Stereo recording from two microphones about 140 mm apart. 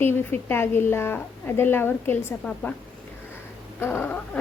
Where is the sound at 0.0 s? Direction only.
15° left (ahead or behind).